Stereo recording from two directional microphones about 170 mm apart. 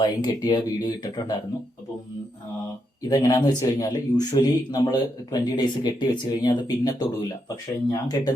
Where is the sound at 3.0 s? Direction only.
20° left (ahead or behind).